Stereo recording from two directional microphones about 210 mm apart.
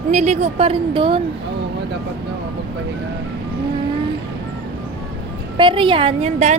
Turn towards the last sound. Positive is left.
turn(degrees=-30)  # may be behind; listen again after turning